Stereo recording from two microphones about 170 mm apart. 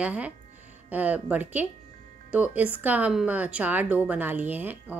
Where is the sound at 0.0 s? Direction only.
5° right (ahead or behind).